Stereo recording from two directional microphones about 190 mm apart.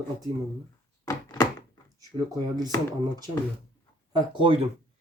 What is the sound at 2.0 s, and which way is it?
Speech, 20° right (ahead or behind).